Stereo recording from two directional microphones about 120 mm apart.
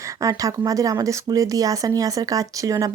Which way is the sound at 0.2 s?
30° right (ahead or behind).